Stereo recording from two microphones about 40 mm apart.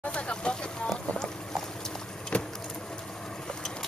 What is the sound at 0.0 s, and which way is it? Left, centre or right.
Vehicle, left.